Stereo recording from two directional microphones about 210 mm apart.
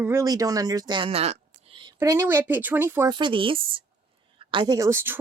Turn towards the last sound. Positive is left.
turn(degrees=-10)  # may be behind; listen again after turning